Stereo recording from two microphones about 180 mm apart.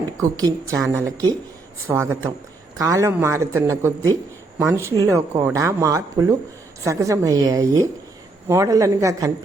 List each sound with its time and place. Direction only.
0.2 s speech: 20° right (ahead or behind)